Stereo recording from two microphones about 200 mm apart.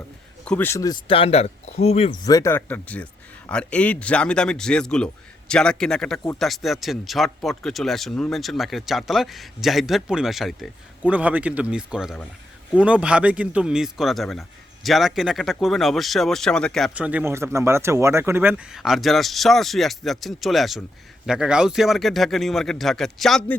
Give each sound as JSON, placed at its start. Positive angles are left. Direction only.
{"t": 0.4, "sound": "speech", "side_deg": 10}
{"t": 2.2, "sound": "a man's voice", "side_deg": 15}